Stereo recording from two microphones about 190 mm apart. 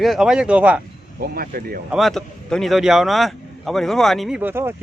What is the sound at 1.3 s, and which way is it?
Speech, 50° right (ahead or behind).